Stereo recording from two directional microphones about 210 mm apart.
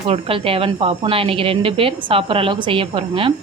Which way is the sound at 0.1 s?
25° right (ahead or behind).